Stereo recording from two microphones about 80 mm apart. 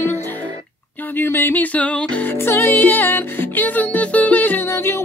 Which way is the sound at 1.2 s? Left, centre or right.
Left.